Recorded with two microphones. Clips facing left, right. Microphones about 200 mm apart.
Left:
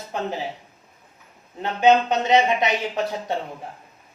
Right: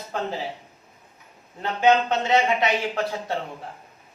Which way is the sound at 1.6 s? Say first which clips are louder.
Left 2 dB; 20° left (ahead or behind).